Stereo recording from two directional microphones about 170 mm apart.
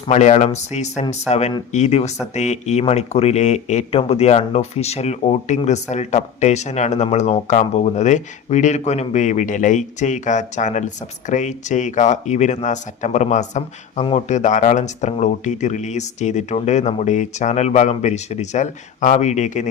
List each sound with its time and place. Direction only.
0.1 s speech: 40° left (ahead or behind)